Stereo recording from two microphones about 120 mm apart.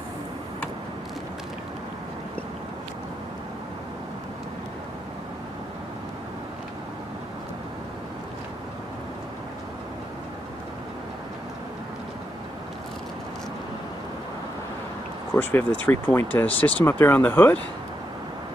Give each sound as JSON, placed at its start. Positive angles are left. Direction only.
{"t": 15.3, "sound": "speech", "side_deg": 15}